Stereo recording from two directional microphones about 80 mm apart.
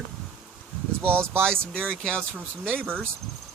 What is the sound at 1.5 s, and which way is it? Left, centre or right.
Speech, centre.